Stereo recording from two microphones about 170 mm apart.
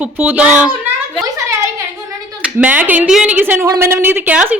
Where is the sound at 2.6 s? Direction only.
10° right (ahead or behind).